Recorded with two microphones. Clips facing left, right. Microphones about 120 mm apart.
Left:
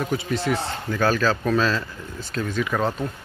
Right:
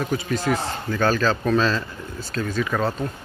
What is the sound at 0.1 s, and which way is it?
Speech, 25° left (ahead or behind).